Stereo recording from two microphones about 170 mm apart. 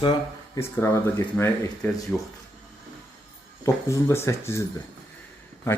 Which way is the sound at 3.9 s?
15° left (ahead or behind).